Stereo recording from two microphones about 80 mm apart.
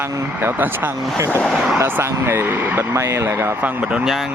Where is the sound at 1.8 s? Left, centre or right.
Right.